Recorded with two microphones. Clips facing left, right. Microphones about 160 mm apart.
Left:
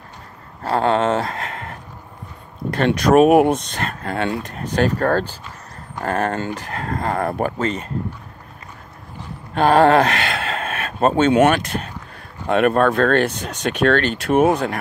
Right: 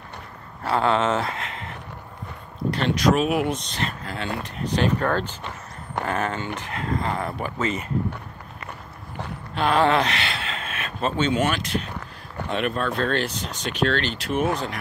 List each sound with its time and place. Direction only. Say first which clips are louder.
0.7 s speech: left 3 dB; 30° left (ahead or behind)
1.2 s a sound: left 3 dB; 45° left (ahead or behind)
2.7 s speech: left 6 dB; 55° left (ahead or behind)
9.6 s speech: left 7 dB; 45° left (ahead or behind)
11.3 s speech: left 8 dB; 60° left (ahead or behind)